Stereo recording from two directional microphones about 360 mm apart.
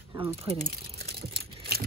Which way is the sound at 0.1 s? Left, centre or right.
Centre.